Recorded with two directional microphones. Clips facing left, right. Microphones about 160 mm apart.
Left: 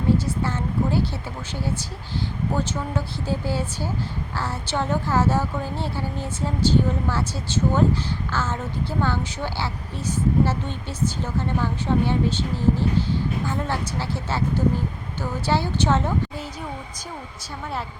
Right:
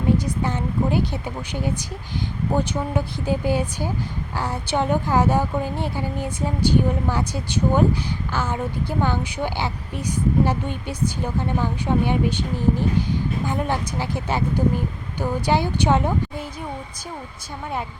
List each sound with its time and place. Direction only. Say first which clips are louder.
0.3 s a woman's voice: right 1 dB; 15° right (ahead or behind)